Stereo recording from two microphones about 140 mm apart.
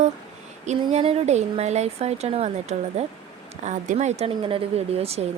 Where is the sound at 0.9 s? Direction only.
50° right (ahead or behind).